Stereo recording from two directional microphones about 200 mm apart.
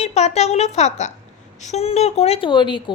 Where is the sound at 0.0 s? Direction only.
35° left (ahead or behind).